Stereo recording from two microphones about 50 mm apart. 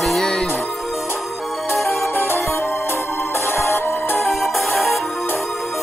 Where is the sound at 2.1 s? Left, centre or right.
Left.